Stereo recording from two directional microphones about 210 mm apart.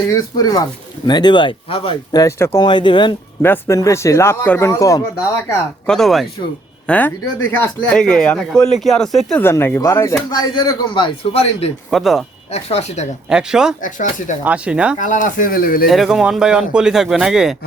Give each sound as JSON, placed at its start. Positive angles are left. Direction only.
{"t": 0.1, "sound": "a man's voice", "side_deg": 15}
{"t": 3.4, "sound": "speech", "side_deg": 10}
{"t": 5.8, "sound": "a man's voice", "side_deg": 0}
{"t": 11.9, "sound": "speech", "side_deg": 0}
{"t": 12.5, "sound": "speech", "side_deg": 30}
{"t": 13.2, "sound": "speech", "side_deg": -5}
{"t": 13.8, "sound": "speech", "side_deg": 40}
{"t": 14.4, "sound": "speech", "side_deg": -5}
{"t": 14.9, "sound": "speech", "side_deg": 35}
{"t": 15.9, "sound": "speech", "side_deg": 0}